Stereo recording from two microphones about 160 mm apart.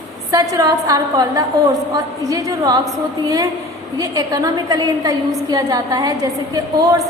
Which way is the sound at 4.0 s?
25° right (ahead or behind).